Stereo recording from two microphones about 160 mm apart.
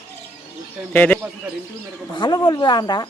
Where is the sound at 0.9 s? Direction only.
10° left (ahead or behind).